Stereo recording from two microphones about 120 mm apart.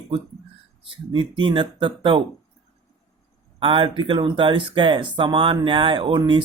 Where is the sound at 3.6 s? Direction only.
45° right (ahead or behind).